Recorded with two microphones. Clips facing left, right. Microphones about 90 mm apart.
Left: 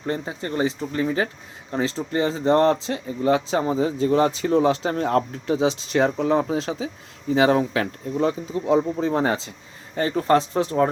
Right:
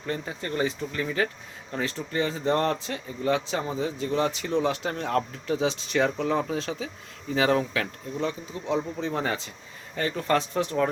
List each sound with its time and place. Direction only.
0.0 s speech: 30° left (ahead or behind)